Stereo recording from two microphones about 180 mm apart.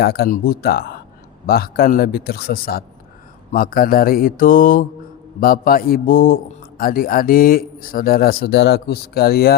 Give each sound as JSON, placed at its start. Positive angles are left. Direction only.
{"t": 0.0, "sound": "a man's voice", "side_deg": 60}